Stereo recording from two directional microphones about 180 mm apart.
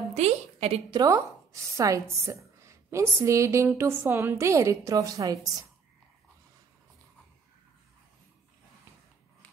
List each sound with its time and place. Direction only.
0.1 s a woman's voice: 35° right (ahead or behind)
0.9 s a woman's voice: 20° right (ahead or behind)